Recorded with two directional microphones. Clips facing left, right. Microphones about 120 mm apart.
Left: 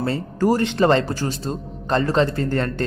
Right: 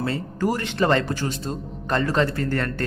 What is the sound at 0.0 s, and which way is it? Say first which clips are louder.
Speech: left 4 dB; 35° left (ahead or behind).